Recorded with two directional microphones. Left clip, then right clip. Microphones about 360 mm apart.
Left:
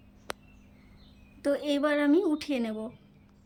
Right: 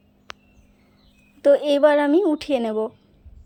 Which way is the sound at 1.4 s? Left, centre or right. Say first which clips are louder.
Right 12 dB; centre.